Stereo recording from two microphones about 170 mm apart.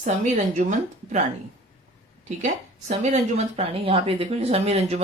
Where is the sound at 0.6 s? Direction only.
45° right (ahead or behind).